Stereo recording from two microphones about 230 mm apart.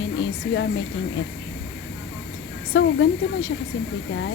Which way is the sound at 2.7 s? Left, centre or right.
Left.